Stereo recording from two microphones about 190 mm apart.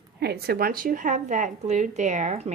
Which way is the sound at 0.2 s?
60° right (ahead or behind).